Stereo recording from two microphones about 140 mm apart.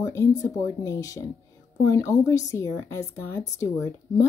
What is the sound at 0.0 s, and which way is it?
Speech, 20° left (ahead or behind).